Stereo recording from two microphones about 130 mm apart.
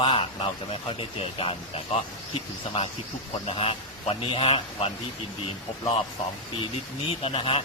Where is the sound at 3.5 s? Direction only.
45° left (ahead or behind).